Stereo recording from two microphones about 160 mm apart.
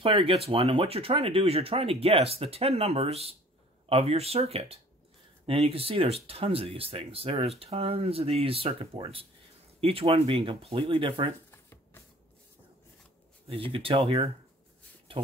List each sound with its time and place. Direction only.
0.0 s speech: 35° right (ahead or behind)
11.5 s a sound: 15° left (ahead or behind)
13.5 s speech: 35° right (ahead or behind)